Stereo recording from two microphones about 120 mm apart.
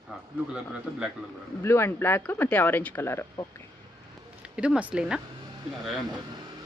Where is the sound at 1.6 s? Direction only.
20° left (ahead or behind).